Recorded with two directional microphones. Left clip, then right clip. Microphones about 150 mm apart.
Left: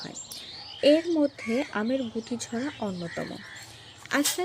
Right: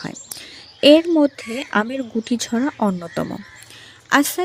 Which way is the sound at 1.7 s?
90° right.